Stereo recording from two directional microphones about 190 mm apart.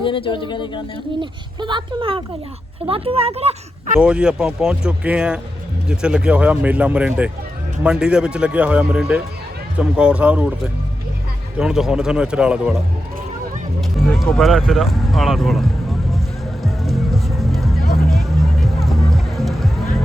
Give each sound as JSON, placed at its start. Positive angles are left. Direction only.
{"t": 0.0, "sound": "speech", "side_deg": 25}
{"t": 1.2, "sound": "speech", "side_deg": -25}
{"t": 4.0, "sound": "speech", "side_deg": -5}
{"t": 14.1, "sound": "speech", "side_deg": 5}
{"t": 16.6, "sound": "music", "side_deg": 0}
{"t": 17.7, "sound": "music", "side_deg": 55}
{"t": 18.1, "sound": "music", "side_deg": 0}